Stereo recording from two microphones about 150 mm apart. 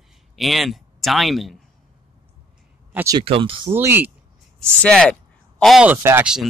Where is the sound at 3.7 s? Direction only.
15° right (ahead or behind).